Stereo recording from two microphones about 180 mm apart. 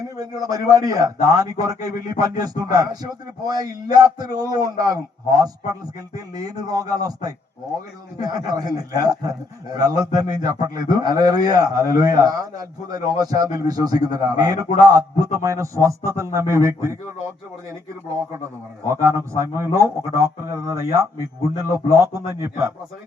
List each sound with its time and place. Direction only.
0.2 s a man's voice: 20° right (ahead or behind)
18.9 s a man's voice: 15° right (ahead or behind)